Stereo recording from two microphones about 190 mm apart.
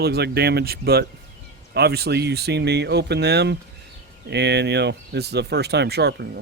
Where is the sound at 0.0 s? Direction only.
55° right (ahead or behind).